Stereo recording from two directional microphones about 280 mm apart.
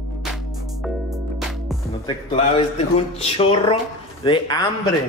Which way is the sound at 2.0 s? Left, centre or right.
Centre.